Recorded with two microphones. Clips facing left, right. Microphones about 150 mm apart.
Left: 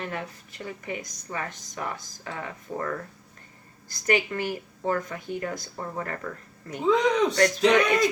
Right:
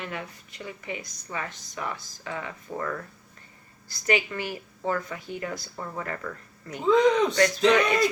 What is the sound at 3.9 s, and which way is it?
A woman's voice, 45° left (ahead or behind).